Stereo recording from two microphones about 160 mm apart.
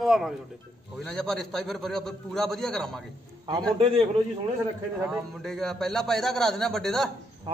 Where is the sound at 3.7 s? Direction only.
35° right (ahead or behind).